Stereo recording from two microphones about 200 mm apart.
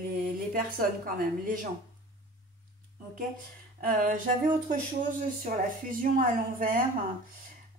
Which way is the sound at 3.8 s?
45° right (ahead or behind).